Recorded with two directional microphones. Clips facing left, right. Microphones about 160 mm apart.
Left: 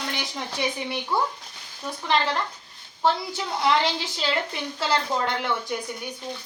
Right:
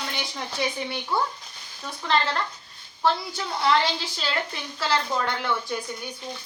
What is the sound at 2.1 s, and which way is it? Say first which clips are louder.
A woman's voice: even; 15° left (ahead or behind).